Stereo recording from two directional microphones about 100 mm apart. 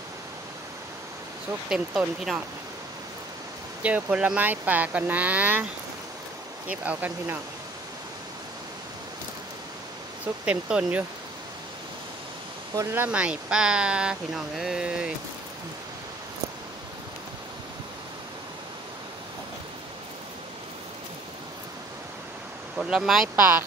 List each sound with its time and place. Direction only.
1.7 s speech: 5° right (ahead or behind)
3.8 s speech: 15° right (ahead or behind)
6.7 s speech: 15° right (ahead or behind)
10.2 s speech: 10° right (ahead or behind)
12.9 s speech: 15° right (ahead or behind)
22.8 s speech: 5° right (ahead or behind)